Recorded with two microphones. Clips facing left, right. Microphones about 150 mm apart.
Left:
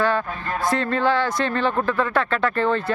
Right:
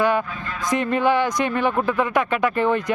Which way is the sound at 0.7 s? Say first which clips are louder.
Right 2 dB; 15° right (ahead or behind).